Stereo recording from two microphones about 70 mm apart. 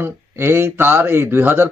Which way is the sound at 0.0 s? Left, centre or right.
Right.